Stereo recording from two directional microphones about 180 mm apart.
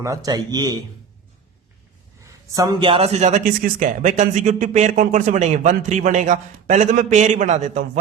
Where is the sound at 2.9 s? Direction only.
35° right (ahead or behind).